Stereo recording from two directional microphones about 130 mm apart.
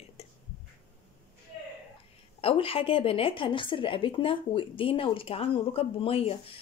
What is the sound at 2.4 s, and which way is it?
Speech, 45° left (ahead or behind).